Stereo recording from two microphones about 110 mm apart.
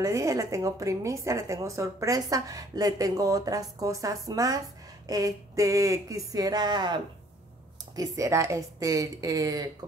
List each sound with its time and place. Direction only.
0.0 s a woman's voice: 30° right (ahead or behind)